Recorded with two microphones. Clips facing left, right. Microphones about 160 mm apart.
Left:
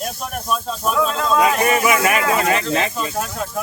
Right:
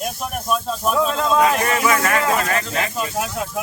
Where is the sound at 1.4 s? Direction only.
15° left (ahead or behind).